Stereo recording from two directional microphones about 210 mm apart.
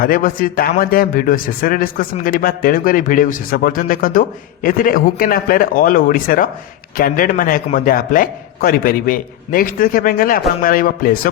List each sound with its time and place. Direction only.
0.0 s speech: 45° left (ahead or behind)